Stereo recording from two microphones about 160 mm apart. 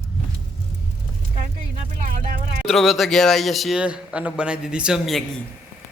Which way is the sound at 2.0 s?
55° right (ahead or behind).